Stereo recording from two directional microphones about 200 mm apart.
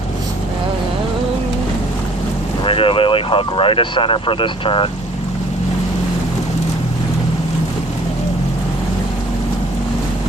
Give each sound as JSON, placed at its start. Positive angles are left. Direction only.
{"t": 2.6, "sound": "speech", "side_deg": 25}